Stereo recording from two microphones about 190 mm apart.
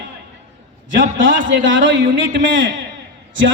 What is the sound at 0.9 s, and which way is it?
Speech, 75° right (ahead or behind).